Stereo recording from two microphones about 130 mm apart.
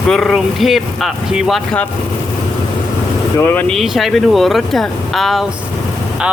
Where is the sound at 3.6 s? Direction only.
Centre (ahead or behind).